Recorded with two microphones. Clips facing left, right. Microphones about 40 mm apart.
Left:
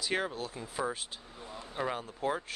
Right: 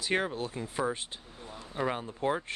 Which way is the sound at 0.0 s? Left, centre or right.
Centre.